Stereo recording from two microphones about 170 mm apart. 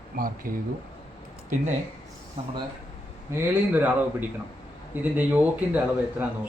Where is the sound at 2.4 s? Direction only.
35° right (ahead or behind).